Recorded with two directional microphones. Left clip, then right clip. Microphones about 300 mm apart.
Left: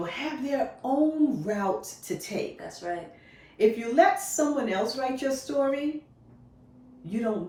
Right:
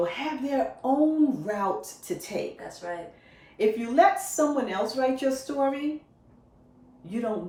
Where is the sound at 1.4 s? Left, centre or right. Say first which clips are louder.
Even; centre.